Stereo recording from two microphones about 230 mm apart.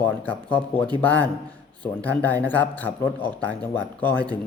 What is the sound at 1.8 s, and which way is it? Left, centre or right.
Speech, centre.